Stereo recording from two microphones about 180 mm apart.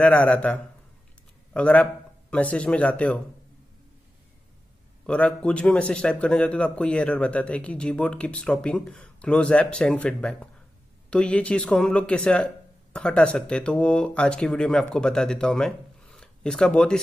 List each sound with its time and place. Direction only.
0.0 s a man's voice: 5° left (ahead or behind)
5.0 s a man's voice: 5° left (ahead or behind)